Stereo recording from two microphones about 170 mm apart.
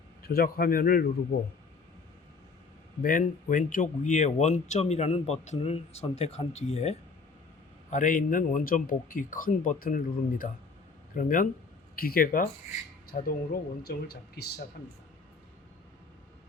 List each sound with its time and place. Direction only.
0.2 s a man's voice: 60° left (ahead or behind)
3.0 s a man's voice: 50° left (ahead or behind); by 14.6 s 70° left (ahead or behind)